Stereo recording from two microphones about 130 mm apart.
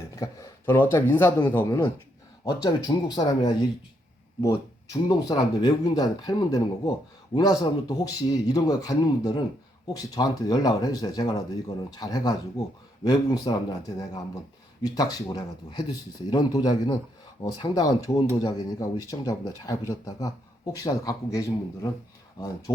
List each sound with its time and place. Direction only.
0.2 s a sound: 25° left (ahead or behind)
0.6 s speech: 15° left (ahead or behind)
2.4 s speech: 30° left (ahead or behind)